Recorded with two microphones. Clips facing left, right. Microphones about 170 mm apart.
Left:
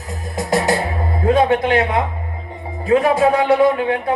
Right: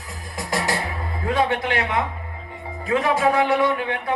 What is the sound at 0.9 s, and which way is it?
Music, 40° left (ahead or behind).